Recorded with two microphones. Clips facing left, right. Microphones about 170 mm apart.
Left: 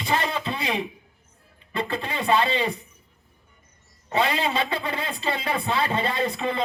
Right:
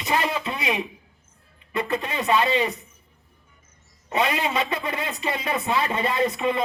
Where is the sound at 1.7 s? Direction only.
30° left (ahead or behind).